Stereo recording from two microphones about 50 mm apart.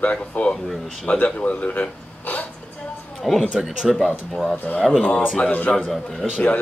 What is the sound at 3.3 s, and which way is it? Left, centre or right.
Speech, centre.